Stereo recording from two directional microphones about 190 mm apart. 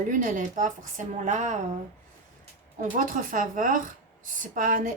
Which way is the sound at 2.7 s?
45° right (ahead or behind).